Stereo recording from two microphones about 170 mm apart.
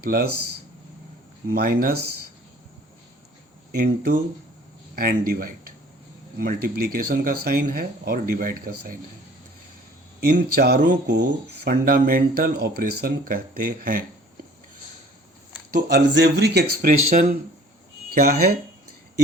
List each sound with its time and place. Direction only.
0.0 s speech: 65° right (ahead or behind)
1.5 s speech: 65° right (ahead or behind)
3.8 s speech: 65° right (ahead or behind)
10.2 s speech: 65° right (ahead or behind)
15.7 s speech: 75° right (ahead or behind)
16.8 s speech: 55° right (ahead or behind)